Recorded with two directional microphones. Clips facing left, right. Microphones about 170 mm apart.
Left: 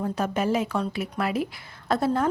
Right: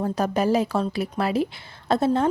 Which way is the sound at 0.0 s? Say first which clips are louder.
Right 3 dB; 35° right (ahead or behind).